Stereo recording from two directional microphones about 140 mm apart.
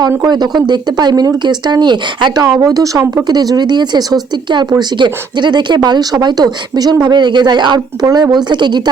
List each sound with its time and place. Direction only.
0.2 s speech: 30° right (ahead or behind)